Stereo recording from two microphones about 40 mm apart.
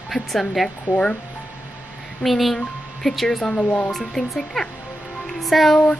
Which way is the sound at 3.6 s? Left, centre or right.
Left.